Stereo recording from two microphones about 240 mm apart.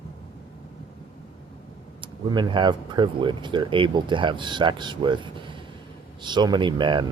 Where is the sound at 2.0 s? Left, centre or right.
Centre.